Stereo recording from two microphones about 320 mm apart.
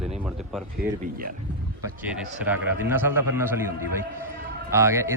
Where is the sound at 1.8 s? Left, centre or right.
Centre.